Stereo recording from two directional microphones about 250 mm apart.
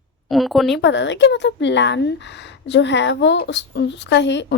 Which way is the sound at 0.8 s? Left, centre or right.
Left.